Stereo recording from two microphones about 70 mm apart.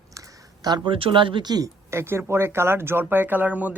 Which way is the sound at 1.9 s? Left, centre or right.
Right.